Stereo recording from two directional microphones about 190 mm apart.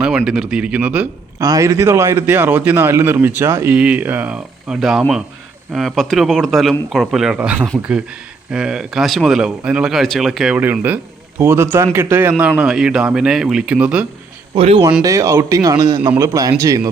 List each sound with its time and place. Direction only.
0.3 s a man's voice: 5° right (ahead or behind)
14.5 s speech: 30° right (ahead or behind)
15.0 s a man's voice: 15° right (ahead or behind)